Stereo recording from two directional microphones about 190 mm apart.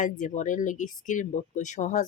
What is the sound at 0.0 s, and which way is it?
Speech, 40° left (ahead or behind).